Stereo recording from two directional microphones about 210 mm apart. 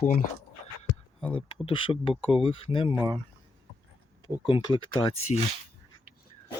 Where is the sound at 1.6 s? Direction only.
25° left (ahead or behind).